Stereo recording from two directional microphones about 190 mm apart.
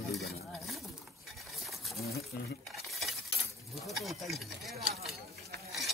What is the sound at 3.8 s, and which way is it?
Speech, centre (ahead or behind).